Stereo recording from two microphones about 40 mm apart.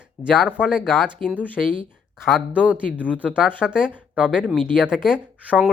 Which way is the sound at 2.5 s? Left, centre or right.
Right.